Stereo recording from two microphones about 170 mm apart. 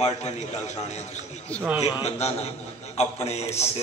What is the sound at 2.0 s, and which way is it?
A man's voice, 40° left (ahead or behind).